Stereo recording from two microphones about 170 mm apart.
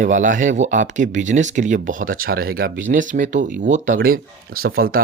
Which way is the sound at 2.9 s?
50° right (ahead or behind).